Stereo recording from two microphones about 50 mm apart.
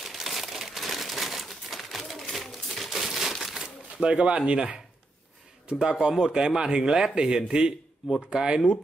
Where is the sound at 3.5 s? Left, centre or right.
Centre.